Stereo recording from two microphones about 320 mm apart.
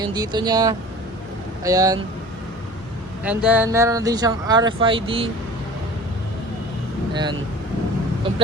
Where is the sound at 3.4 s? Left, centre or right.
Centre.